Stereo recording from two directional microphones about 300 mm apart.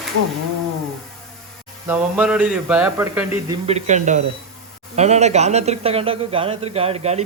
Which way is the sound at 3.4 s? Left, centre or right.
Centre.